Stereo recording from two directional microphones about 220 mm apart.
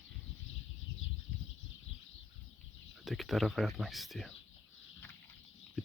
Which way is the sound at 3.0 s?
Centre (ahead or behind).